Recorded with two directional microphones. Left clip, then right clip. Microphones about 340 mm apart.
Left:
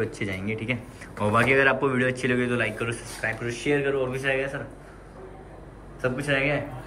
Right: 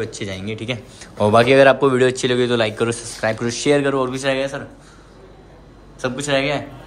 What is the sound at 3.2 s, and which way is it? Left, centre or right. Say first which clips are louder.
Speech: right 8 dB; right.